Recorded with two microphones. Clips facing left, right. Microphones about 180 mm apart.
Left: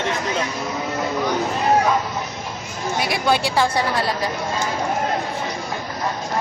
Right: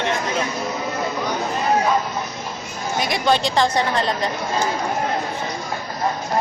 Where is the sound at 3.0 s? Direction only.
5° left (ahead or behind).